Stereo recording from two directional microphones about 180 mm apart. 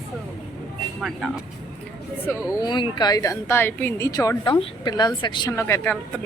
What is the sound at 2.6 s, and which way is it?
A woman's voice, 25° left (ahead or behind).